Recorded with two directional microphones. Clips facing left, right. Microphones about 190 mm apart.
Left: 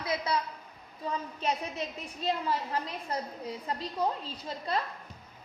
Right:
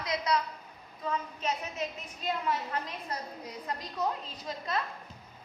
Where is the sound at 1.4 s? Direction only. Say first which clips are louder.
Left 1 dB; 30° left (ahead or behind).